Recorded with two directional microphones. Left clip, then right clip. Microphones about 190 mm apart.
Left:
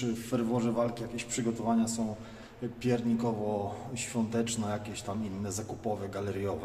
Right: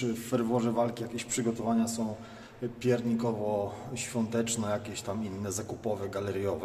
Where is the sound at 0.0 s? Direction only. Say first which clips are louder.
Right 2 dB; 15° right (ahead or behind).